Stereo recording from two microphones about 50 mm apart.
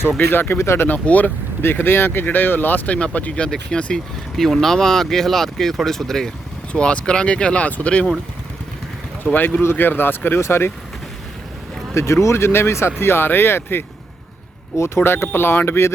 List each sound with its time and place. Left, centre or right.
0.2 s speech: left
0.6 s speech: left
0.9 s speech: left
1.6 s speech: left
2.9 s speech: left
6.7 s speech: centre
9.2 s speech: left
11.9 s speech: left
14.8 s speech: left